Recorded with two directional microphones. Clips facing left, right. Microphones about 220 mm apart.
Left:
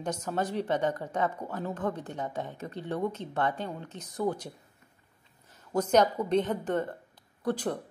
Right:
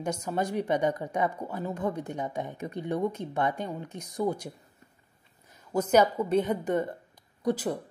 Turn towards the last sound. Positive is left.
turn(degrees=-10)  # may be behind; listen again after turning